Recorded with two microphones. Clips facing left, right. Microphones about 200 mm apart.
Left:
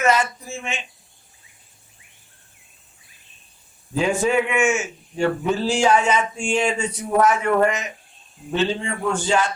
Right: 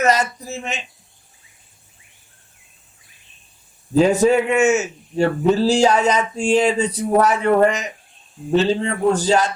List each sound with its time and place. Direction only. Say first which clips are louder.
0.0 s a man's voice: right 2 dB; 40° right (ahead or behind)
3.9 s a man's voice: right 6 dB; 40° right (ahead or behind)